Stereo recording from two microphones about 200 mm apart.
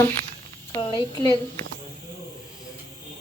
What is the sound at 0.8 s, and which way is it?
Speech, 20° left (ahead or behind).